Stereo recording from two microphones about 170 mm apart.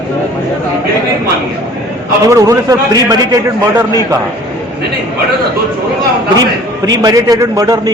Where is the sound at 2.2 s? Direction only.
20° right (ahead or behind).